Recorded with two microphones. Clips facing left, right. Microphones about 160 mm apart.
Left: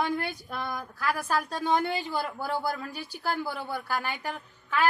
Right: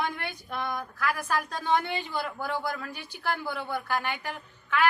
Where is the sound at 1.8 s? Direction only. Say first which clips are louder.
Left 2 dB; 40° left (ahead or behind).